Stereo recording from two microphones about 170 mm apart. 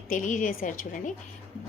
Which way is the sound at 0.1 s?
50° left (ahead or behind).